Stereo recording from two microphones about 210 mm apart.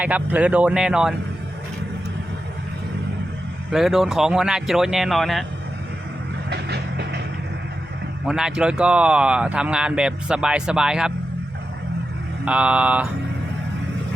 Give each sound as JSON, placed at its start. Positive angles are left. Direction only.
{"t": 0.0, "sound": "speech", "side_deg": -5}
{"t": 3.7, "sound": "speech", "side_deg": 0}
{"t": 6.5, "sound": "music", "side_deg": -50}
{"t": 8.3, "sound": "speech", "side_deg": -5}
{"t": 12.5, "sound": "speech", "side_deg": -5}